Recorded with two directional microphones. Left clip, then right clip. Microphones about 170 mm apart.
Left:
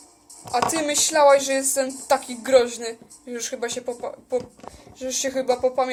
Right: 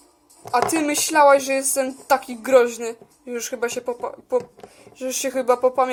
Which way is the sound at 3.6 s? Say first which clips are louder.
Right 4 dB; 20° right (ahead or behind).